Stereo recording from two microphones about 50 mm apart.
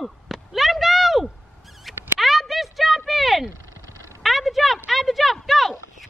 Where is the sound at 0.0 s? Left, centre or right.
Centre.